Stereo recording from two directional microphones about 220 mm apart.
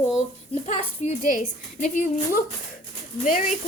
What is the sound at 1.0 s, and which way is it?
A woman's voice, 35° left (ahead or behind).